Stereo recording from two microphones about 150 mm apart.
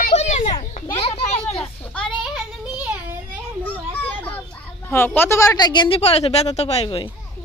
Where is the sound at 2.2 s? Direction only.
5° right (ahead or behind).